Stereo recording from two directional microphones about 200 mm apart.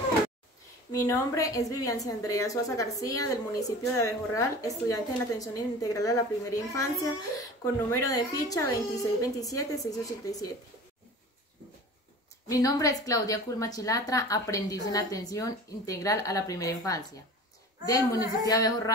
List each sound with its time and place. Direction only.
0.9 s a woman's voice: 15° left (ahead or behind)
12.4 s a woman's voice: 15° left (ahead or behind)